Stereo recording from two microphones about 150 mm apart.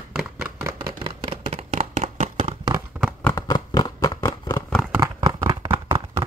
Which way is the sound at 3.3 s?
25° left (ahead or behind).